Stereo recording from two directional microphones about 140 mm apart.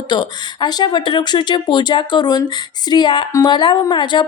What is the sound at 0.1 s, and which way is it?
A woman's voice, 30° left (ahead or behind).